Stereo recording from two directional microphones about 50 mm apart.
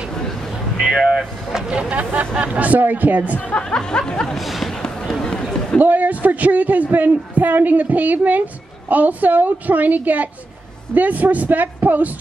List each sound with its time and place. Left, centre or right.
0.7 s speech: centre
1.8 s a man's voice: right
3.3 s speech: left
3.6 s music: centre
4.4 s speech: centre
4.7 s fireworks: centre
5.2 s chatter: centre
5.8 s a man's voice: right